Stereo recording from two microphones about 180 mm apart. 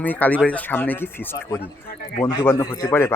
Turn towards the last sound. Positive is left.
turn(degrees=15)  # may be behind; listen again after turning